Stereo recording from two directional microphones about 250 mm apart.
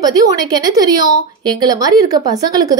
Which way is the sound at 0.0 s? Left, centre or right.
Centre.